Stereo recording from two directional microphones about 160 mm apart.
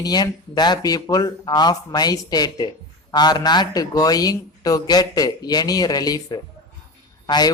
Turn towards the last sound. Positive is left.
turn(degrees=25)  # may be behind; listen again after turning